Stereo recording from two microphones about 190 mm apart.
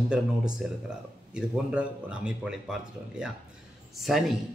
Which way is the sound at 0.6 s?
5° right (ahead or behind).